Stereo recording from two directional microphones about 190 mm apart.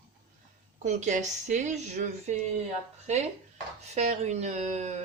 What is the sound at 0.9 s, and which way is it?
Speech, 40° right (ahead or behind).